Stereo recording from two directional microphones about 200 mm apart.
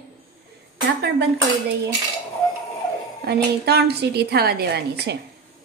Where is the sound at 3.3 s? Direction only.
55° right (ahead or behind).